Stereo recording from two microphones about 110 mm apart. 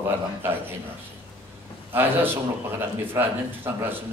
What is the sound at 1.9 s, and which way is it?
A man's voice, 20° right (ahead or behind).